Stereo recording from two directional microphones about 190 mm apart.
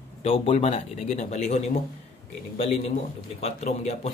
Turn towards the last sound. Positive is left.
turn(degrees=35)  # may be behind; listen again after turning